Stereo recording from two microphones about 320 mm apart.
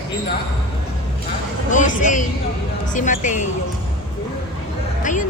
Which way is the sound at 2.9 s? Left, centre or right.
Left.